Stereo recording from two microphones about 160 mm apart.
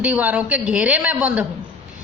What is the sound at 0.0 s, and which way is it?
Speech, 10° right (ahead or behind).